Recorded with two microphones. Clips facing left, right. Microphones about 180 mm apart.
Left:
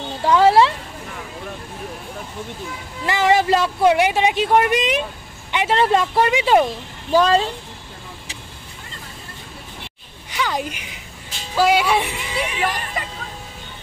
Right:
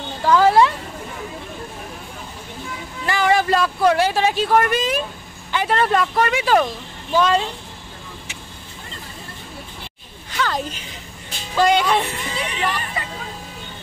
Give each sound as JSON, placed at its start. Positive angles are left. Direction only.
{"t": 0.2, "sound": "a sound", "side_deg": 25}
{"t": 3.1, "sound": "speech", "side_deg": 20}
{"t": 7.1, "sound": "speech", "side_deg": 35}
{"t": 10.3, "sound": "speech", "side_deg": 10}